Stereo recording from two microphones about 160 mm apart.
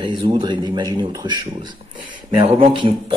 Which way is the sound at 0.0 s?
30° right (ahead or behind).